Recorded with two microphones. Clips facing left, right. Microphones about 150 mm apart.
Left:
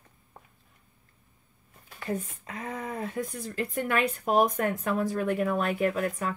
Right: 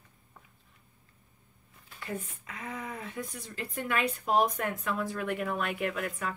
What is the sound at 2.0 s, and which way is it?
Speech, 40° left (ahead or behind).